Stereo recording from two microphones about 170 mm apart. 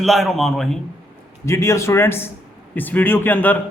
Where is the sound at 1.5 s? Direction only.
15° left (ahead or behind).